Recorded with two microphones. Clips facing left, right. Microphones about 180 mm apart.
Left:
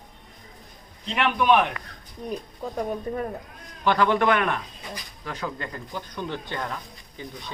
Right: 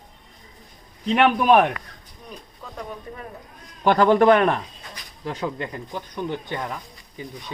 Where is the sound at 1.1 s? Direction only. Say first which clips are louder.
Right 4 dB; 40° right (ahead or behind).